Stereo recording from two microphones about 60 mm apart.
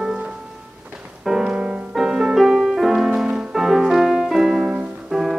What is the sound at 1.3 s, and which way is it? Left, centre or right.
Music, centre.